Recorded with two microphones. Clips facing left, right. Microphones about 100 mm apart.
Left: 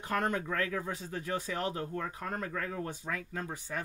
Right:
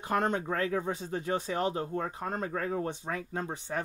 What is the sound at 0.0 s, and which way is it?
Speech, 25° right (ahead or behind).